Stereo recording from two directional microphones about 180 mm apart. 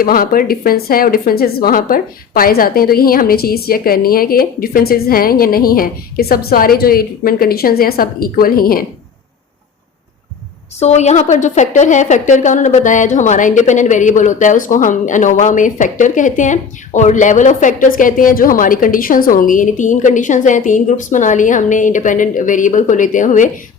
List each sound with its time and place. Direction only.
0.0 s a woman's voice: 55° left (ahead or behind)
10.8 s a woman's voice: 40° left (ahead or behind)